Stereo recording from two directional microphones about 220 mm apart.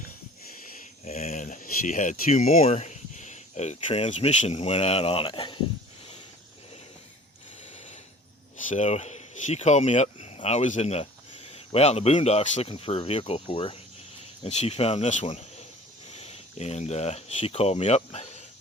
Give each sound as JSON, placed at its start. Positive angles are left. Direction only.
{"t": 1.0, "sound": "speech", "side_deg": 30}
{"t": 8.6, "sound": "speech", "side_deg": 30}